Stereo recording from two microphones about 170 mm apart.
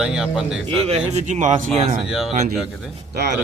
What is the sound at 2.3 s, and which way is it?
Speech, 45° right (ahead or behind).